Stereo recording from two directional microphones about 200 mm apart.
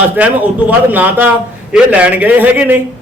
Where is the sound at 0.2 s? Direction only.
5° right (ahead or behind).